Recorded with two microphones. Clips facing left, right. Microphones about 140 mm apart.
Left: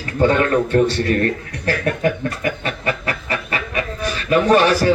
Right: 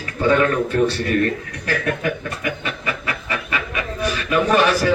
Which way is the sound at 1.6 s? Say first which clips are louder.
Left 4 dB; 40° left (ahead or behind).